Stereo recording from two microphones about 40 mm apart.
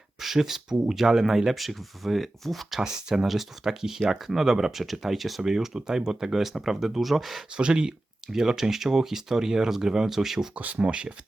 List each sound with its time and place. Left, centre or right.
0.2 s speech: centre
7.5 s speech: right
8.3 s speech: centre
10.5 s speech: right